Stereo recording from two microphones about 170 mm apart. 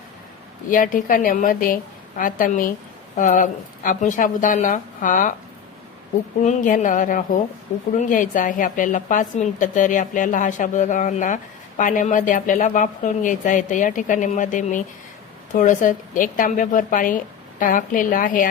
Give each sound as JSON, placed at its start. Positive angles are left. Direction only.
{"t": 0.7, "sound": "a woman's voice", "side_deg": 50}
{"t": 6.4, "sound": "a woman's voice", "side_deg": 45}